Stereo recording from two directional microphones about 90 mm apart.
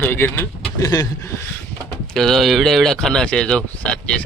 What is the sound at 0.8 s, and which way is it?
Speech, 40° left (ahead or behind).